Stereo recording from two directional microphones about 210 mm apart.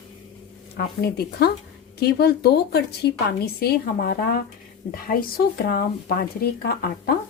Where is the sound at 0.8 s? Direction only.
50° left (ahead or behind).